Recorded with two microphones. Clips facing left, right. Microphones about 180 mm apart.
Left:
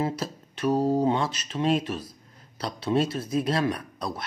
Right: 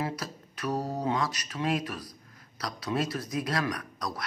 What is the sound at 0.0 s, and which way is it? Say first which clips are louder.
Speech: left 5 dB; 25° left (ahead or behind).